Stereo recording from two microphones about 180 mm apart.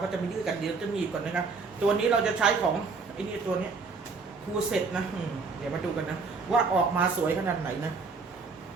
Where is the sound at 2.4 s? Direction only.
5° right (ahead or behind).